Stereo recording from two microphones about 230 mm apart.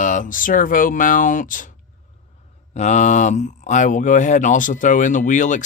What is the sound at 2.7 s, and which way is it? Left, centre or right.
Speech, left.